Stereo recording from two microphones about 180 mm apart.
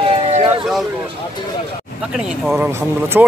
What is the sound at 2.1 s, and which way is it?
Speech, 5° right (ahead or behind).